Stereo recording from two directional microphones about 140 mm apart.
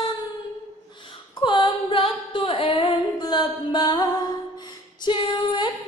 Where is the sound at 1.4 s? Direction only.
35° left (ahead or behind).